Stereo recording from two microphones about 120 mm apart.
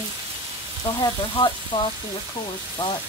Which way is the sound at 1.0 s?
40° left (ahead or behind).